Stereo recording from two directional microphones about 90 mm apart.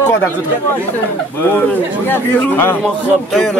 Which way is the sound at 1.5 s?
25° left (ahead or behind).